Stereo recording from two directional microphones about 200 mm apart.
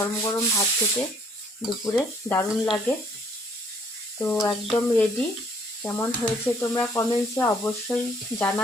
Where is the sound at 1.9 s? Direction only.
10° left (ahead or behind).